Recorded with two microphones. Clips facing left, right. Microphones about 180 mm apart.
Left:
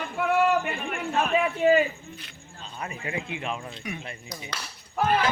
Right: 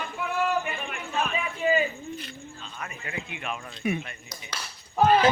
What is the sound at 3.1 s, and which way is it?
Speech, 25° left (ahead or behind).